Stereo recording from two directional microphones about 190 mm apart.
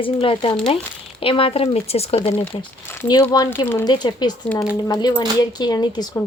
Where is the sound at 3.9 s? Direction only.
20° left (ahead or behind).